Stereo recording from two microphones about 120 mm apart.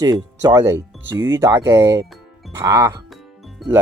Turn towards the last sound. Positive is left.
turn(degrees=0)  # may be behind; listen again after turning